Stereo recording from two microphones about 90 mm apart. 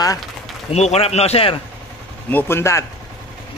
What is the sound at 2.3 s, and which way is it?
Speech, 25° left (ahead or behind).